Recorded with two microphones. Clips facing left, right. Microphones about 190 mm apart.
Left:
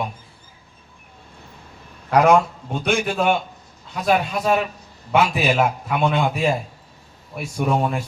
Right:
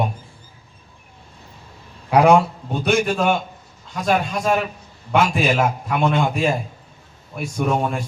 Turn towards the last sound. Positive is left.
turn(degrees=5)  # may be behind; listen again after turning